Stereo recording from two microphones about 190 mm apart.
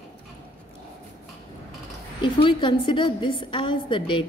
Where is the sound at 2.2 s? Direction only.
25° left (ahead or behind).